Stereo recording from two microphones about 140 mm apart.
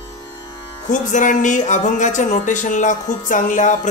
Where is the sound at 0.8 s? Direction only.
65° left (ahead or behind).